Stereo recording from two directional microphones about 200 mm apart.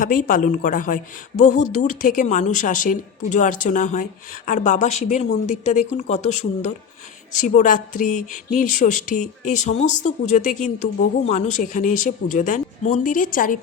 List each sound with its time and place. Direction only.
0.0 s speech: 45° left (ahead or behind)